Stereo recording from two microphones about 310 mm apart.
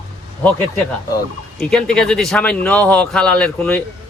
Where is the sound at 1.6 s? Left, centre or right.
Centre.